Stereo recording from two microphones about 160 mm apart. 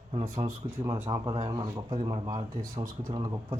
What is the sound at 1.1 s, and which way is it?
Speech, 25° right (ahead or behind).